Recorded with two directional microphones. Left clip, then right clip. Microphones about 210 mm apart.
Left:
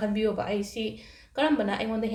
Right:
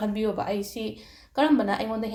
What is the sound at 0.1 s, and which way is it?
A woman's voice, 30° right (ahead or behind).